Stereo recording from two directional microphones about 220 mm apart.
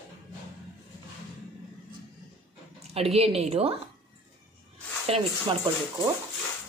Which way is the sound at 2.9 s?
25° right (ahead or behind).